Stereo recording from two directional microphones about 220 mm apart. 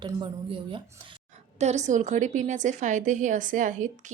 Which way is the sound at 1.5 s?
30° right (ahead or behind).